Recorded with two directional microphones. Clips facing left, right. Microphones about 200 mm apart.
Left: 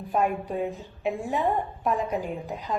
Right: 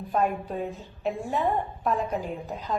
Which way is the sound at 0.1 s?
15° left (ahead or behind).